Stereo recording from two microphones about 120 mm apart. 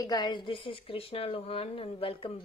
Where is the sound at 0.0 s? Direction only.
35° left (ahead or behind).